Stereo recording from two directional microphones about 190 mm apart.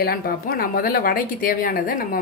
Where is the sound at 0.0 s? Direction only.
50° left (ahead or behind).